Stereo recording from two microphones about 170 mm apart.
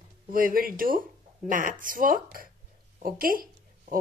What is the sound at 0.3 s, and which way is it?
A woman's voice, 55° right (ahead or behind).